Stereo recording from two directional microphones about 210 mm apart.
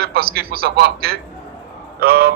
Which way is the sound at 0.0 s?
45° right (ahead or behind).